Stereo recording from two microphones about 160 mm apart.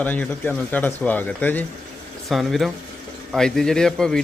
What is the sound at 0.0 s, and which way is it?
A man's voice, 10° left (ahead or behind).